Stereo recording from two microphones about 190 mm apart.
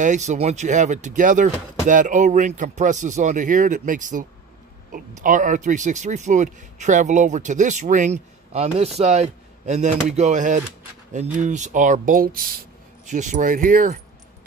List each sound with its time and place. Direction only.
0.0 s speech: 40° right (ahead or behind)